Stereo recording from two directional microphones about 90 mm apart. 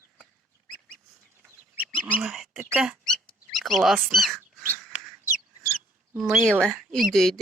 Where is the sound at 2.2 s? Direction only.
Centre (ahead or behind).